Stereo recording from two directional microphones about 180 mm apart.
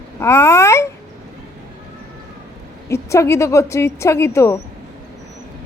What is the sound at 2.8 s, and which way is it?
A woman's voice, 15° left (ahead or behind).